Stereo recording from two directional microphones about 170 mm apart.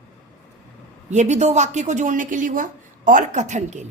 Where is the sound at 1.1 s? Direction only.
45° right (ahead or behind).